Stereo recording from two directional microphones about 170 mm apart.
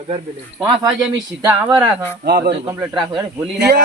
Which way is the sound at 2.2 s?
70° right (ahead or behind).